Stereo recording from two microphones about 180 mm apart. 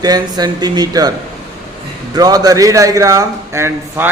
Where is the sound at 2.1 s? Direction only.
20° right (ahead or behind).